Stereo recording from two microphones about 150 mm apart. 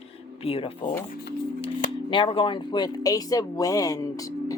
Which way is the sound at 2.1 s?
35° left (ahead or behind).